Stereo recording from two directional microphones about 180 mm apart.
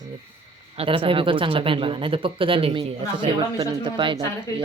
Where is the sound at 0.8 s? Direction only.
30° right (ahead or behind).